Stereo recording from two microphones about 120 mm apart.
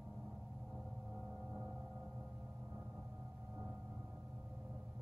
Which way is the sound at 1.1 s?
Centre (ahead or behind).